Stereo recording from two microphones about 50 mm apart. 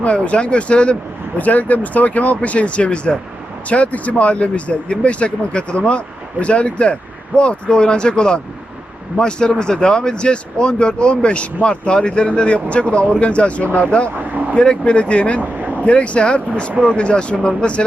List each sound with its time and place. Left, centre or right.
0.0 s speech: left
15.4 s speech: right
15.8 s speech: left